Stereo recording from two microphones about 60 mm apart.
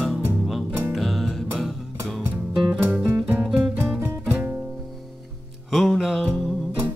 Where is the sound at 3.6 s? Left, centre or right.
Right.